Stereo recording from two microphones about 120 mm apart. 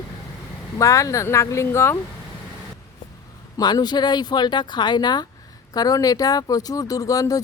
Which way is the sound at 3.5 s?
35° left (ahead or behind).